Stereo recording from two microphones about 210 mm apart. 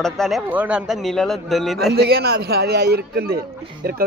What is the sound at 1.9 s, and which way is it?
A man's voice, 50° right (ahead or behind).